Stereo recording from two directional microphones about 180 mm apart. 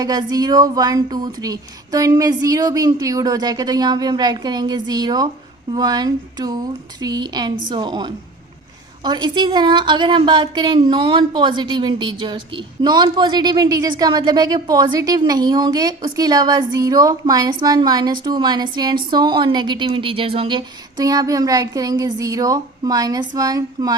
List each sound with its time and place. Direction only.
0.0 s a woman's voice: 20° right (ahead or behind)